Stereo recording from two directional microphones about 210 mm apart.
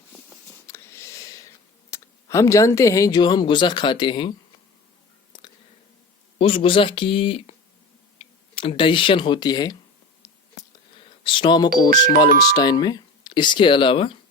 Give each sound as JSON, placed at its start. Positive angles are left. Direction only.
{"t": 0.7, "sound": "a sound", "side_deg": 15}
{"t": 1.9, "sound": "speech", "side_deg": 15}
{"t": 6.4, "sound": "speech", "side_deg": 25}
{"t": 10.2, "sound": "whispering", "side_deg": 15}
{"t": 10.9, "sound": "a sound", "side_deg": 25}
{"t": 11.8, "sound": "speech", "side_deg": 20}